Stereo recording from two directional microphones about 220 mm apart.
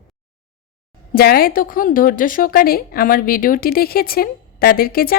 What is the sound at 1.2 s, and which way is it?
Speech, 40° left (ahead or behind).